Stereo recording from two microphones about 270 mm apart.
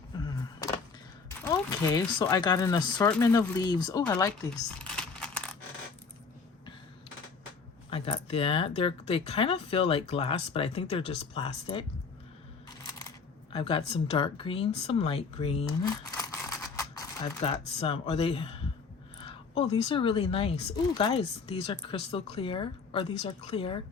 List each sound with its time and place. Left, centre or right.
0.3 s a sound: centre
1.3 s speech: centre
4.8 s crumpling: centre
7.9 s speech: left
13.0 s speech: centre
16.1 s mechanisms: centre
17.4 s speech: centre